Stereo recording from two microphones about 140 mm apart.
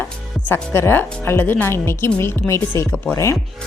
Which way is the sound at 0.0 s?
15° left (ahead or behind).